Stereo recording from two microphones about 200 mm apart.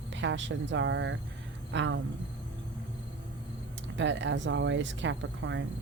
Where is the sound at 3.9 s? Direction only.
65° right (ahead or behind).